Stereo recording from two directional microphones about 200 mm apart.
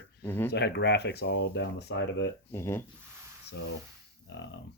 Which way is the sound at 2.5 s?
10° left (ahead or behind).